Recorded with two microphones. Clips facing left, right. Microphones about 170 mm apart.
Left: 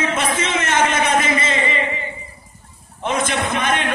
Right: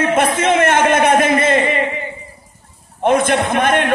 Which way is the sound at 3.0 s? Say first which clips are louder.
Right 7 dB; 55° right (ahead or behind).